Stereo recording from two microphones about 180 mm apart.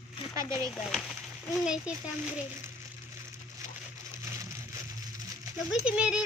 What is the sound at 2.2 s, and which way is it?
Frying, 5° right (ahead or behind).